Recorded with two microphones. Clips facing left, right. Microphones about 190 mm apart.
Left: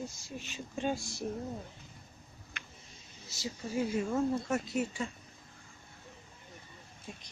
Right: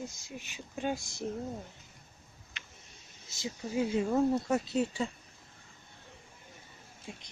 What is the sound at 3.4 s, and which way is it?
Speech, 20° right (ahead or behind).